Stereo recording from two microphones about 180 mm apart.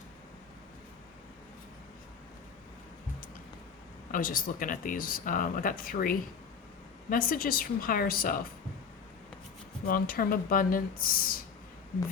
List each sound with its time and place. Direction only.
4.1 s speech: 50° left (ahead or behind)
9.8 s speech: 50° left (ahead or behind)